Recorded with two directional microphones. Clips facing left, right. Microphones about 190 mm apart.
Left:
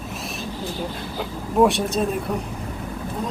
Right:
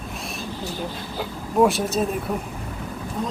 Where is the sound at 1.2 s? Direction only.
Centre (ahead or behind).